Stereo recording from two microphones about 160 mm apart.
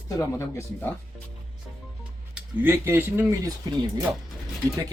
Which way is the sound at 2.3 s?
15° right (ahead or behind).